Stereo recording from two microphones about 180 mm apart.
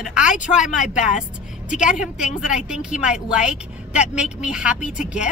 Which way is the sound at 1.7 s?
5° right (ahead or behind).